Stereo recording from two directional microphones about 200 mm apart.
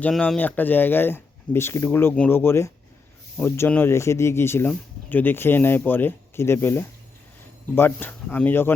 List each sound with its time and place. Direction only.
0.0 s speech: 5° left (ahead or behind)